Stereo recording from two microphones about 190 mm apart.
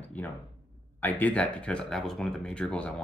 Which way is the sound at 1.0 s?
5° left (ahead or behind).